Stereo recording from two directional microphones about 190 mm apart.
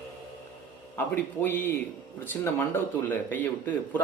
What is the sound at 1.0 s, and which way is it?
Speech, 10° left (ahead or behind).